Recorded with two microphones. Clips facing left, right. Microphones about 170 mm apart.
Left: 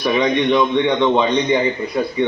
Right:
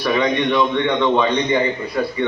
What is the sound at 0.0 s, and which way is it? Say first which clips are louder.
A man's voice: left 2 dB; 15° left (ahead or behind).